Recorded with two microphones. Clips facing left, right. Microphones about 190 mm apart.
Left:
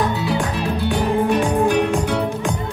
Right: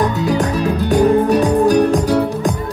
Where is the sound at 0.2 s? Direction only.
40° right (ahead or behind).